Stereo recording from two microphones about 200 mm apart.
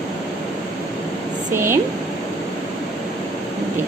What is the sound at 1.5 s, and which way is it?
Speech, 10° right (ahead or behind).